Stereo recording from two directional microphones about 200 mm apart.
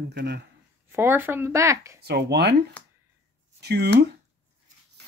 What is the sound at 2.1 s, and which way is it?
Speech, 55° right (ahead or behind).